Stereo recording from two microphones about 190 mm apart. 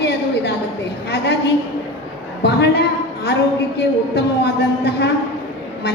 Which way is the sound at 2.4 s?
60° left (ahead or behind).